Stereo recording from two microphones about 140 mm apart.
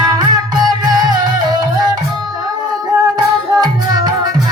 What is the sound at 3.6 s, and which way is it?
Music, 30° right (ahead or behind).